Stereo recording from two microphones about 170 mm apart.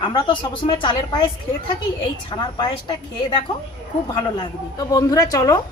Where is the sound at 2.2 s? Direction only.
25° left (ahead or behind).